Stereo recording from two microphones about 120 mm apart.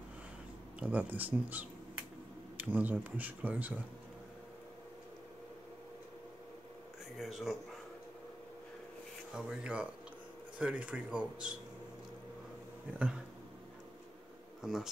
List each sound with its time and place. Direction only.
0.7 s speech: 10° right (ahead or behind)
7.2 s speech: centre (ahead or behind)
9.3 s speech: 10° right (ahead or behind)
14.6 s speech: 5° right (ahead or behind)